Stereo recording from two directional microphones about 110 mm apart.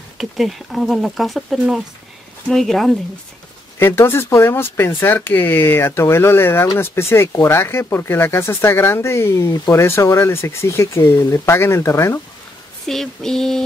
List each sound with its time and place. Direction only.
0.2 s speech: centre (ahead or behind)
3.8 s speech: 20° left (ahead or behind)
12.8 s speech: 5° left (ahead or behind)